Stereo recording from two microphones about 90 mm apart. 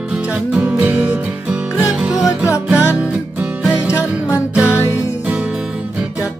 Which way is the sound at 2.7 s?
15° right (ahead or behind).